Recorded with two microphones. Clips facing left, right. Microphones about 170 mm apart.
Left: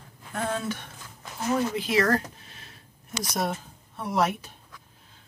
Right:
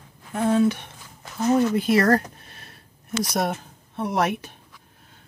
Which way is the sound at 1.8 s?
55° right (ahead or behind).